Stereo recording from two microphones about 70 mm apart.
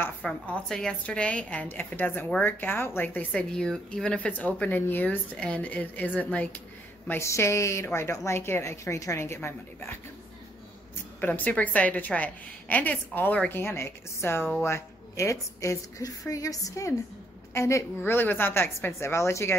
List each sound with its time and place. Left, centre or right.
0.3 s a woman's voice: centre; by 3.3 s left
3.3 s speech: centre
4.3 s a woman's voice: left
7.1 s a woman's voice: left
11.1 s a woman's voice: left
13.5 s a woman's voice: left
16.0 s a woman's voice: left
18.0 s a woman's voice: left